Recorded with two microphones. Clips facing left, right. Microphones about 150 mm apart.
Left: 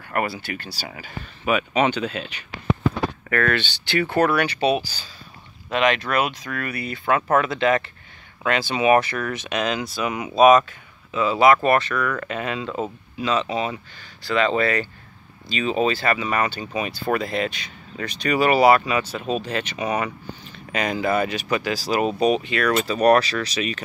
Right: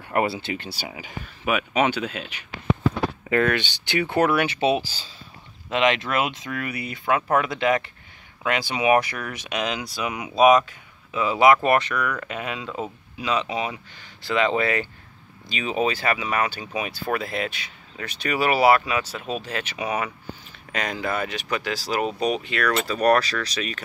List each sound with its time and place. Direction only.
0.1 s speech: 25° right (ahead or behind); by 22.7 s centre (ahead or behind)
22.7 s speech: 15° left (ahead or behind)
22.9 s speech: centre (ahead or behind)